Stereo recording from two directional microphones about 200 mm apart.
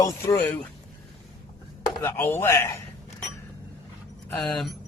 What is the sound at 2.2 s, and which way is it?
Speech, 10° left (ahead or behind).